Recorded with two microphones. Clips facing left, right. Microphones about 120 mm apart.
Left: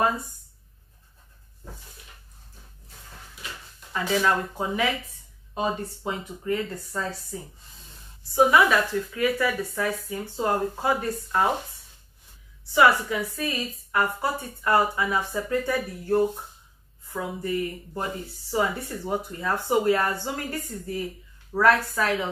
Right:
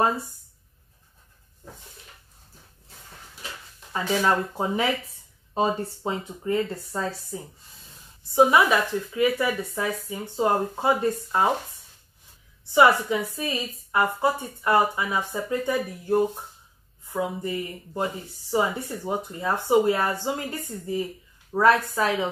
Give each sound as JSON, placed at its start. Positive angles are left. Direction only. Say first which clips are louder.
{"t": 3.9, "sound": "speech", "louder": "right 1 dB", "side_deg": -30}
{"t": 8.2, "sound": "speech", "louder": "right 1 dB", "side_deg": -20}
{"t": 12.7, "sound": "a woman's voice", "louder": "right 1 dB", "side_deg": -20}